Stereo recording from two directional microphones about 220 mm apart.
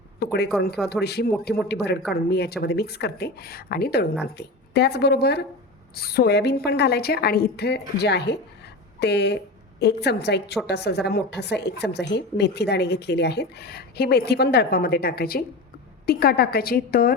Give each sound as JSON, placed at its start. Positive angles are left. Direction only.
{"t": 0.2, "sound": "a woman's voice", "side_deg": 45}